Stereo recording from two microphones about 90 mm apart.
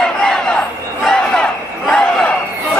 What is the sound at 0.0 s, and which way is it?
Battle cry, 5° left (ahead or behind).